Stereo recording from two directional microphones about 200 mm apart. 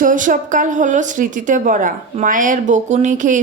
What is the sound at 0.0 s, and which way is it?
A woman's voice, 40° right (ahead or behind).